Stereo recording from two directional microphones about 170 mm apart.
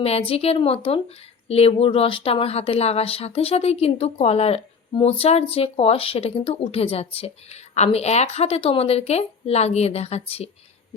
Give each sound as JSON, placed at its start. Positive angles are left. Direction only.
{"t": 0.0, "sound": "speech", "side_deg": 35}